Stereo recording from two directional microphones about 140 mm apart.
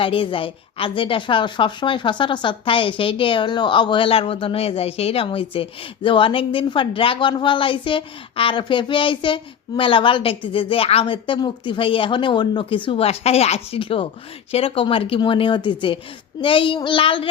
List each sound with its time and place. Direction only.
0.0 s a woman's voice: 40° left (ahead or behind)